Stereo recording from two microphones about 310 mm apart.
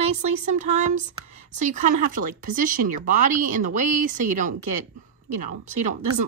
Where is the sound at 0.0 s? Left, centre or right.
Right.